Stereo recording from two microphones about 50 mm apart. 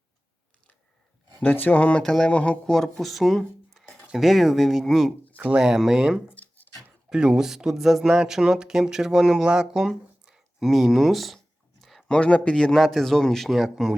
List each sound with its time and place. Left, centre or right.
1.4 s speech: left
2.0 s speech: centre
2.3 s speech: left
2.6 s speech: centre
6.3 s a sound: left
7.1 s speech: centre
11.8 s a sound: centre
12.0 s speech: centre
12.7 s speech: centre